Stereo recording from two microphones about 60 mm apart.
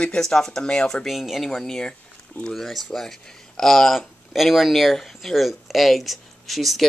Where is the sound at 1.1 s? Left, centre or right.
Centre.